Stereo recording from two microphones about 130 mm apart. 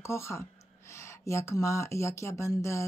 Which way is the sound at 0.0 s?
20° left (ahead or behind).